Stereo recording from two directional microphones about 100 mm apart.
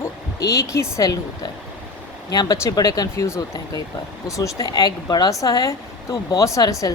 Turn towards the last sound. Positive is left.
turn(degrees=35)  # may be behind; listen again after turning